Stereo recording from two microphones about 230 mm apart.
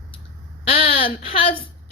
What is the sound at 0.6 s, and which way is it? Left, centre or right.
Speech, left.